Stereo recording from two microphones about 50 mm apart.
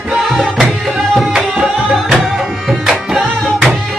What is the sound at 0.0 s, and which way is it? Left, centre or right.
Music, centre.